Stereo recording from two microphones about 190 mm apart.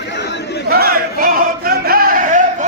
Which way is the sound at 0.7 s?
50° right (ahead or behind).